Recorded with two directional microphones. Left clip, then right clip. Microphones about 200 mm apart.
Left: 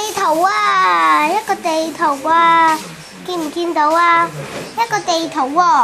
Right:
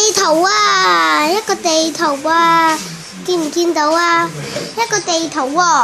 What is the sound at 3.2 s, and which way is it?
A child's voice, 5° right (ahead or behind).